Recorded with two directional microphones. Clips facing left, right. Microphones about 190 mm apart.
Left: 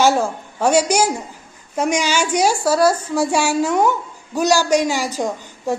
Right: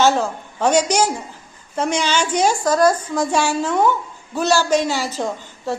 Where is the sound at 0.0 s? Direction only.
10° left (ahead or behind).